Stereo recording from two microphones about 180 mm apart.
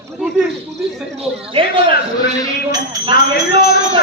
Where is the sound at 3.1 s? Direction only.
60° left (ahead or behind).